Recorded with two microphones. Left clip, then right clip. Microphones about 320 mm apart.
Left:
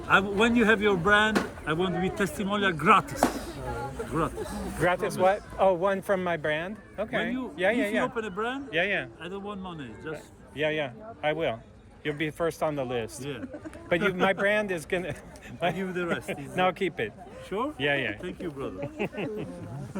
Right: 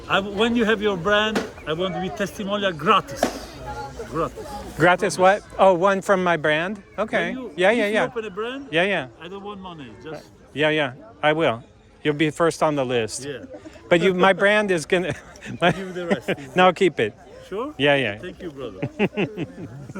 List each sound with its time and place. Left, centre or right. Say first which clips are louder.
0.1 s speech: right 2 dB; centre
4.8 s speech: right 8 dB; right
8.1 s speech: right 3 dB; centre
8.7 s speech: right 8 dB; right